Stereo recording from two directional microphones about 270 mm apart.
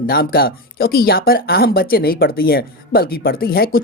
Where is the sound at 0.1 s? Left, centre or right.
Left.